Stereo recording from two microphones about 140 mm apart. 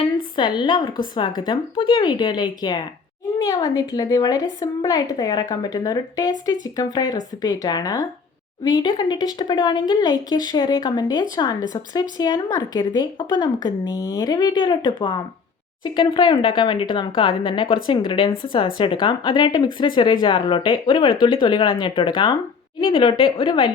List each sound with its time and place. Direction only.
0.3 s speech: 35° left (ahead or behind)